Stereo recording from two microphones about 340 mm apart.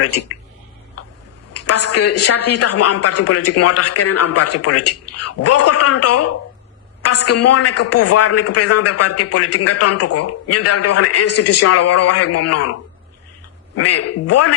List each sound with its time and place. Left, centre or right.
1.5 s a woman's voice: left
13.7 s a woman's voice: left